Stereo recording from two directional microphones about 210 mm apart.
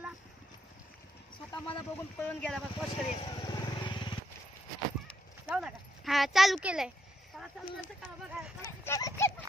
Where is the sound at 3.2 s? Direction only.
20° left (ahead or behind).